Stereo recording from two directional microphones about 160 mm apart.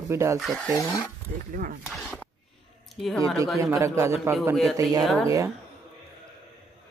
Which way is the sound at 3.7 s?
20° right (ahead or behind).